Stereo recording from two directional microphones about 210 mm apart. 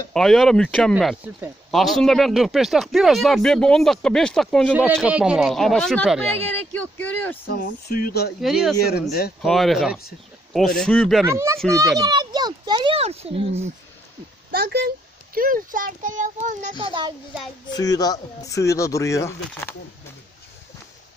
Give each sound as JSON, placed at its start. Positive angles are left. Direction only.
{"t": 0.1, "sound": "speech", "side_deg": 0}
{"t": 7.4, "sound": "speech", "side_deg": 55}
{"t": 8.4, "sound": "speech", "side_deg": 0}
{"t": 11.2, "sound": "a child's voice", "side_deg": -15}
{"t": 14.5, "sound": "speech", "side_deg": -50}
{"t": 16.7, "sound": "a child's voice", "side_deg": -20}
{"t": 17.6, "sound": "speech", "side_deg": 15}